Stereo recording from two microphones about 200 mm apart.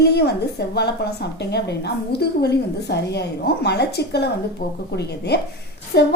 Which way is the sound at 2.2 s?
55° left (ahead or behind).